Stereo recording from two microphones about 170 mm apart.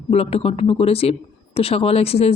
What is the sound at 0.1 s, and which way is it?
Speech, 35° left (ahead or behind).